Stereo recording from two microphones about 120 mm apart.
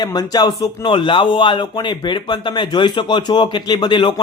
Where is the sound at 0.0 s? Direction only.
35° left (ahead or behind).